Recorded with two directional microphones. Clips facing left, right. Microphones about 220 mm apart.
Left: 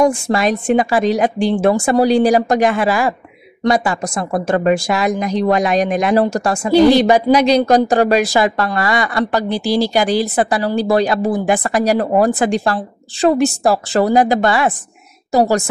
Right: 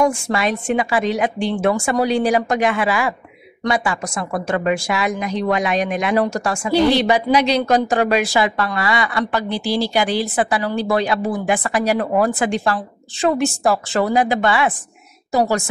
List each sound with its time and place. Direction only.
0.0 s speech: 40° left (ahead or behind)